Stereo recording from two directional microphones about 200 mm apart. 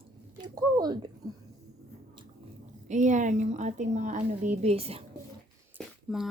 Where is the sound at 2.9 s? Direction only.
40° right (ahead or behind).